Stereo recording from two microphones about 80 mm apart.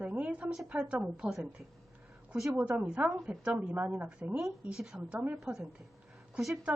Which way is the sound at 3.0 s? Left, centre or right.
Centre.